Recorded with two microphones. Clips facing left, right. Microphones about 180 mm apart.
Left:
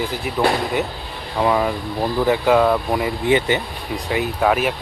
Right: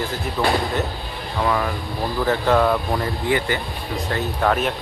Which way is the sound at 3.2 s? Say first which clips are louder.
Left 5 dB; 20° left (ahead or behind).